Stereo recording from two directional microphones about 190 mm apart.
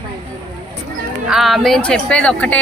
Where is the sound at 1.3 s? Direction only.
Centre (ahead or behind).